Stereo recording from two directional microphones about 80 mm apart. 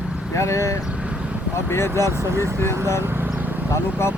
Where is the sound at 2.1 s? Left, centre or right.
Right.